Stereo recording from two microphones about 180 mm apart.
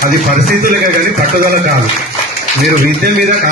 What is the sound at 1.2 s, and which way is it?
Speech, 50° right (ahead or behind).